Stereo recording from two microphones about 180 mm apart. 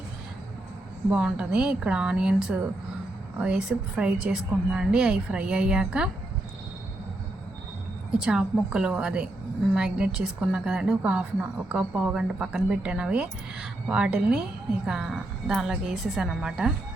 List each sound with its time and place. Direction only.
1.1 s a woman's voice: 5° right (ahead or behind)
8.1 s a woman's voice: 5° right (ahead or behind)